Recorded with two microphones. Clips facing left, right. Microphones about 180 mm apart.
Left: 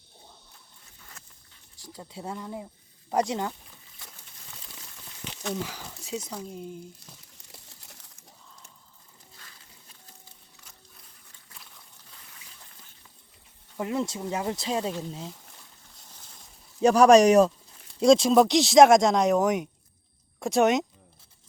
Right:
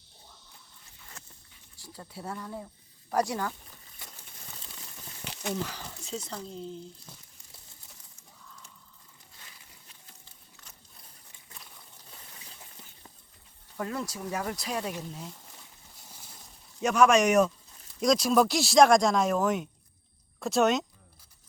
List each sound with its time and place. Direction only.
1.8 s speech: 15° left (ahead or behind)
5.6 s speech: 10° left (ahead or behind)
13.7 s speech: 20° left (ahead or behind)
16.1 s a sound: 10° right (ahead or behind)
16.8 s speech: 35° left (ahead or behind); by 20.8 s 15° left (ahead or behind)